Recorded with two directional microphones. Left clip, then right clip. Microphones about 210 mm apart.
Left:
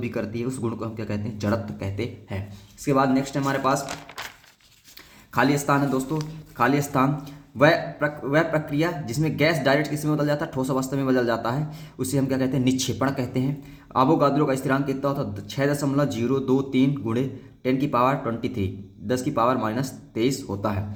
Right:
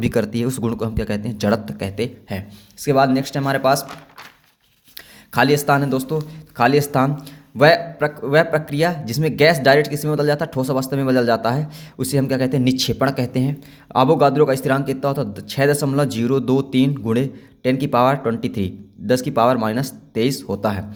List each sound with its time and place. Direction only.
0.0 s speech: 50° right (ahead or behind)
5.3 s speech: 40° right (ahead or behind)